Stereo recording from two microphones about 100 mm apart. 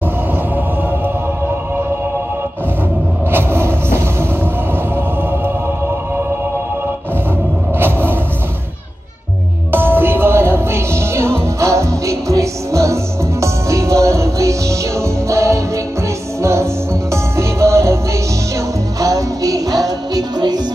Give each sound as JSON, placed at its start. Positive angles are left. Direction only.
{"t": 3.3, "sound": "vehicle", "side_deg": -25}
{"t": 7.8, "sound": "a sound", "side_deg": -20}
{"t": 9.7, "sound": "music", "side_deg": -20}
{"t": 17.1, "sound": "music", "side_deg": -30}
{"t": 18.9, "sound": "music", "side_deg": -35}